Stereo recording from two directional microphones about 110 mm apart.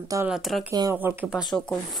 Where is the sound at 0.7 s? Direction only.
35° right (ahead or behind).